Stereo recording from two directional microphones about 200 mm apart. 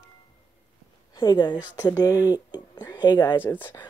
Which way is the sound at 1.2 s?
20° left (ahead or behind).